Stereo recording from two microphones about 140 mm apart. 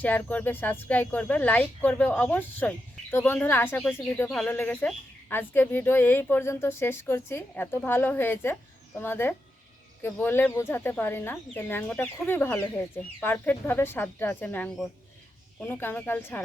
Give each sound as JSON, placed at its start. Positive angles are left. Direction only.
{"t": 0.0, "sound": "speech", "side_deg": 10}
{"t": 4.3, "sound": "speech", "side_deg": 5}